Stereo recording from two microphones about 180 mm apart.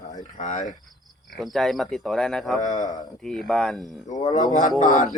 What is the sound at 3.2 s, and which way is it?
Speech, centre (ahead or behind).